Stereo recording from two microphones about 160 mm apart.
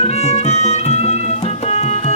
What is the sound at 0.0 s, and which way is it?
Music, 40° left (ahead or behind).